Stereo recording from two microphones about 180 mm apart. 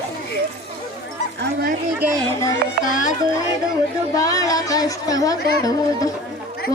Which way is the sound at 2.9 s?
45° left (ahead or behind).